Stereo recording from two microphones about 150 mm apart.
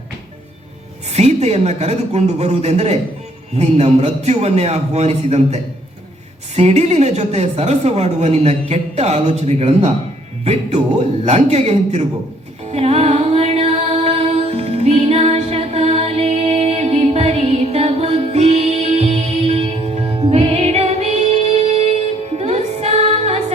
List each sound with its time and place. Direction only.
1.1 s speech: 45° right (ahead or behind)
6.6 s speech: 45° right (ahead or behind)
12.7 s music: 45° right (ahead or behind)